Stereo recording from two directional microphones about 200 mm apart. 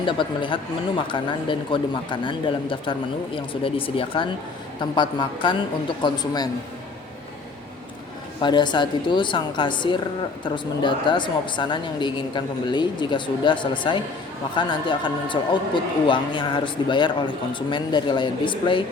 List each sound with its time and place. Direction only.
0.0 s a woman's voice: 25° left (ahead or behind)
8.4 s a woman's voice: 20° left (ahead or behind)